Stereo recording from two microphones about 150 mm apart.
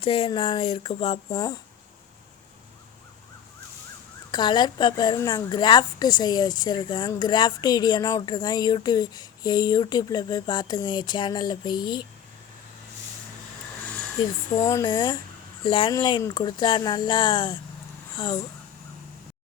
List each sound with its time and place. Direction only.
0.0 s speech: 35° left (ahead or behind)
1.3 s speech: 25° left (ahead or behind)
4.3 s speech: 30° left (ahead or behind)
14.2 s speech: 35° left (ahead or behind)
14.6 s speech: 20° left (ahead or behind)